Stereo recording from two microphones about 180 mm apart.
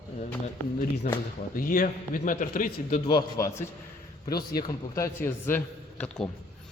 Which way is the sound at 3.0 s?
25° left (ahead or behind).